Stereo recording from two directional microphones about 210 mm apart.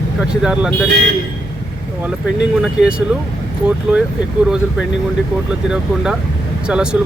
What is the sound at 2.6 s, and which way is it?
Speech, 5° right (ahead or behind).